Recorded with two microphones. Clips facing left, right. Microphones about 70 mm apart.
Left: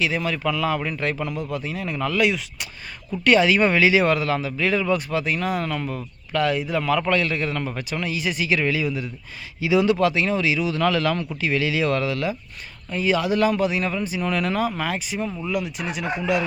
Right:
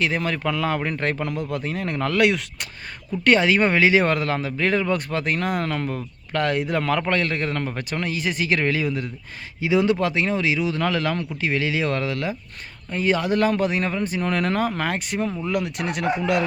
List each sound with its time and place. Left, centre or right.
0.0 s a man's voice: right
3.2 s a man's voice: right